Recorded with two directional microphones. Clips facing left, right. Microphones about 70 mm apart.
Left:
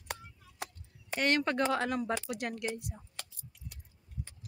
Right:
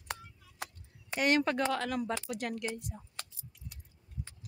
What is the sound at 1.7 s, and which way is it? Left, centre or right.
Speech, centre.